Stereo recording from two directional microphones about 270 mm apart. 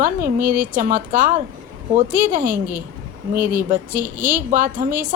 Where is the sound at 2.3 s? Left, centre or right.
Right.